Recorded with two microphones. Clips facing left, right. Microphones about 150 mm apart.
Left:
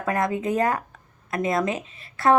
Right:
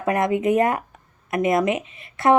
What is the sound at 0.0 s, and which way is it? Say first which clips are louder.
Speech: right 4 dB; 20° right (ahead or behind).